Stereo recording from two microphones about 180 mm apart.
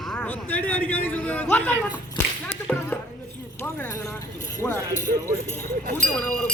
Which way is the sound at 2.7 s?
10° left (ahead or behind).